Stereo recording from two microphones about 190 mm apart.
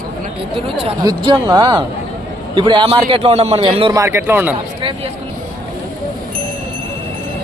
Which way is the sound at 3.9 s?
15° right (ahead or behind).